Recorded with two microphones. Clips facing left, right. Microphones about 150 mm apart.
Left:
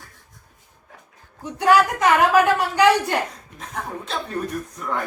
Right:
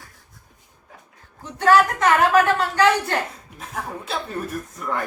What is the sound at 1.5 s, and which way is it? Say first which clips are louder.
Speech: even; 10° left (ahead or behind).